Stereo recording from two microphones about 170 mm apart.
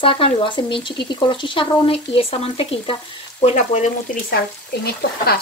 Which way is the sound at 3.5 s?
45° left (ahead or behind).